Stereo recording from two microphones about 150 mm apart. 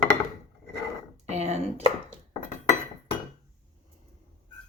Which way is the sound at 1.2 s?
45° right (ahead or behind).